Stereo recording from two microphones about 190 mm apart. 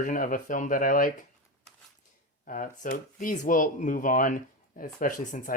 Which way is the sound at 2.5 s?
45° left (ahead or behind).